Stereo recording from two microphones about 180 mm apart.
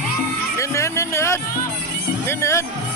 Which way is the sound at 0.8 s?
15° left (ahead or behind).